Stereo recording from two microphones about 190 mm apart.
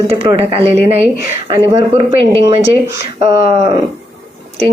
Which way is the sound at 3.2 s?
35° right (ahead or behind).